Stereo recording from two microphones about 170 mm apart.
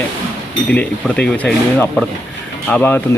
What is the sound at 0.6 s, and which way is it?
Speech, 5° left (ahead or behind).